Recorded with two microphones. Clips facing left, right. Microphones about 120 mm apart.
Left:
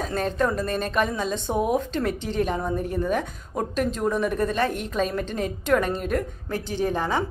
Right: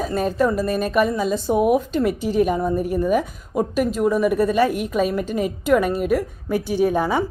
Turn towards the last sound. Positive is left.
turn(degrees=-10)  # may be behind; listen again after turning